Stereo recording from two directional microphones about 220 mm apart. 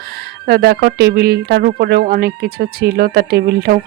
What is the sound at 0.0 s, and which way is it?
Speech, 45° right (ahead or behind).